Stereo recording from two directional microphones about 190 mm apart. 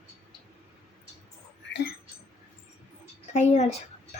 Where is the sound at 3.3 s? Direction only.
35° left (ahead or behind).